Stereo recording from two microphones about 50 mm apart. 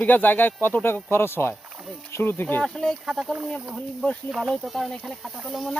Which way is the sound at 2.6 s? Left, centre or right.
Centre.